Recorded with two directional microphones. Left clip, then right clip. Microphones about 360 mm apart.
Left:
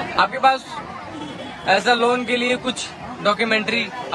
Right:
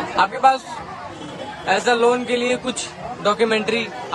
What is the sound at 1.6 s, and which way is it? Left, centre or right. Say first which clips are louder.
A man's voice: even; centre.